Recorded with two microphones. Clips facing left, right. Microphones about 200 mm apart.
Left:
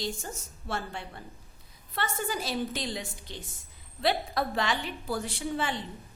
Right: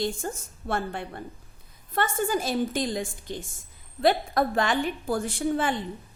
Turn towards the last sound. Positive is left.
turn(degrees=-50)  # may be behind; listen again after turning